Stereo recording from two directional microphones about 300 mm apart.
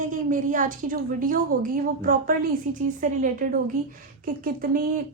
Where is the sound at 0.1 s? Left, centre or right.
Right.